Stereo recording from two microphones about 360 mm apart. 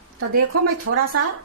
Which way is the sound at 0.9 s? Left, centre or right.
Right.